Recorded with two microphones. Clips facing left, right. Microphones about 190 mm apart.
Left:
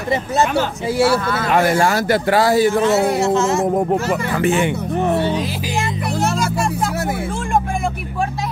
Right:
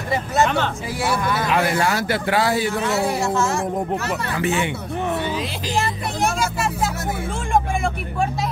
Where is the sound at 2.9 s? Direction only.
20° left (ahead or behind).